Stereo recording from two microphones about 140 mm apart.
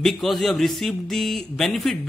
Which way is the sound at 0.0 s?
Centre (ahead or behind).